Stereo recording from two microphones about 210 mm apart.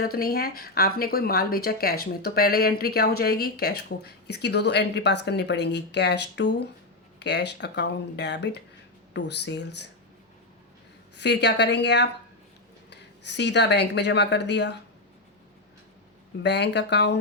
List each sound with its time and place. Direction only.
0.0 s a woman's voice: 45° left (ahead or behind)
11.2 s a woman's voice: 55° left (ahead or behind)
16.4 s a woman's voice: 55° left (ahead or behind)